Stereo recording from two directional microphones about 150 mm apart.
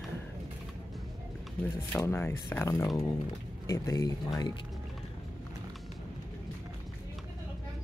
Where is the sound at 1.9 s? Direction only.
15° left (ahead or behind).